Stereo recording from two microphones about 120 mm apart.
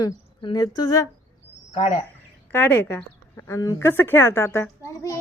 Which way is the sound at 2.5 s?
15° left (ahead or behind).